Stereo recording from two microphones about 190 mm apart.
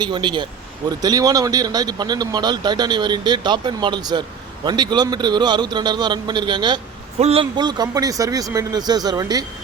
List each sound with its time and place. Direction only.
0.0 s speech: 25° right (ahead or behind)